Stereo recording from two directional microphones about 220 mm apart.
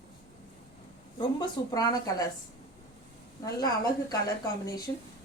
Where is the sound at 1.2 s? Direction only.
20° left (ahead or behind).